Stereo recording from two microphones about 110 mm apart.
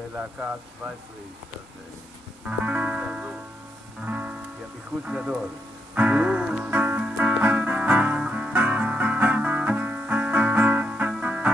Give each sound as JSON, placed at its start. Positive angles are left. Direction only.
{"t": 0.1, "sound": "speech", "side_deg": -15}
{"t": 2.4, "sound": "music", "side_deg": -10}
{"t": 5.0, "sound": "speech", "side_deg": -10}
{"t": 5.9, "sound": "music", "side_deg": -10}